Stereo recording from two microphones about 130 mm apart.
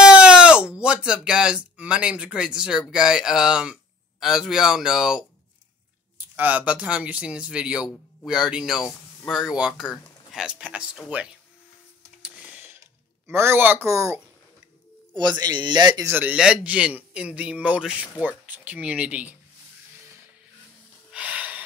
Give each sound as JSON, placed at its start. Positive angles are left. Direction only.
{"t": 0.0, "sound": "a sound", "side_deg": -5}
{"t": 2.9, "sound": "a man's voice", "side_deg": -5}
{"t": 12.2, "sound": "music", "side_deg": -10}
{"t": 13.3, "sound": "speech", "side_deg": -20}
{"t": 15.1, "sound": "a man's voice", "side_deg": -35}
{"t": 16.1, "sound": "a man's voice", "side_deg": -15}
{"t": 21.1, "sound": "snort", "side_deg": -10}